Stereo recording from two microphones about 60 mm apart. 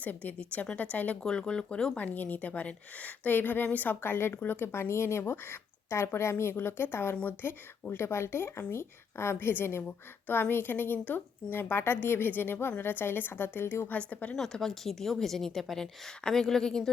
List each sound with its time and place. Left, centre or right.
0.0 s a woman's voice: left
1.2 s a woman's voice: centre
2.0 s a woman's voice: left
9.8 s a woman's voice: left
14.1 s a woman's voice: left
14.3 s a woman's voice: centre